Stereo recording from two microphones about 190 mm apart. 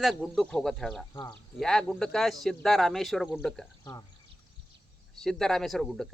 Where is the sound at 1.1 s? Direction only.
20° left (ahead or behind).